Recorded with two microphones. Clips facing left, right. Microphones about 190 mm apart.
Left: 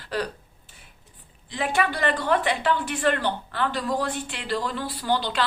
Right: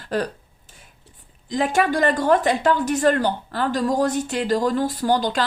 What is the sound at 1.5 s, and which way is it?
A woman's voice, 40° right (ahead or behind).